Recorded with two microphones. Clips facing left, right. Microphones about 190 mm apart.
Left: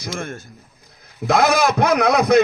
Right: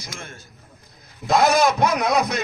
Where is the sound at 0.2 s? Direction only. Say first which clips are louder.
Left 10 dB; 50° left (ahead or behind).